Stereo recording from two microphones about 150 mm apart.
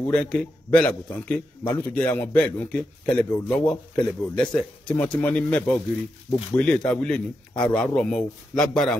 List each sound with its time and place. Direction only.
0.0 s a man's voice: 5° left (ahead or behind)